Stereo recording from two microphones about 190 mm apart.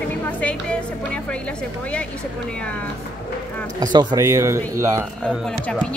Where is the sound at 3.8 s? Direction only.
20° right (ahead or behind).